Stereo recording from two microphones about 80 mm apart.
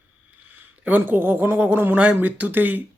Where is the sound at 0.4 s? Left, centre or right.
Right.